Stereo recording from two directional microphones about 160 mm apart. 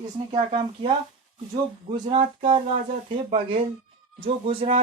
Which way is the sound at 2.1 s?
35° right (ahead or behind).